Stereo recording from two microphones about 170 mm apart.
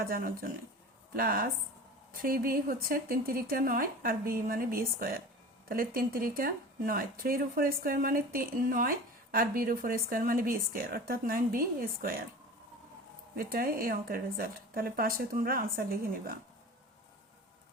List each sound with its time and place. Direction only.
0.0 s speech: 60° right (ahead or behind)
13.3 s speech: 60° right (ahead or behind)